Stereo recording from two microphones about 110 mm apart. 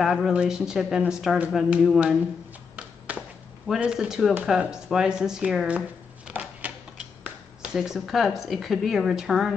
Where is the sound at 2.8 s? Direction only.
10° right (ahead or behind).